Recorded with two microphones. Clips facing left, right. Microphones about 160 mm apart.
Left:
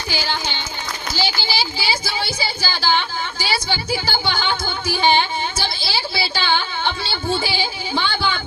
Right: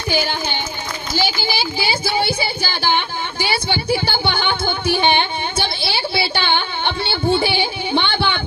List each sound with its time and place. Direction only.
0.1 s speech: 55° right (ahead or behind)
3.4 s music: 60° right (ahead or behind)